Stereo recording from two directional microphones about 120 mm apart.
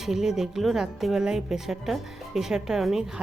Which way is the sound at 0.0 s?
5° right (ahead or behind).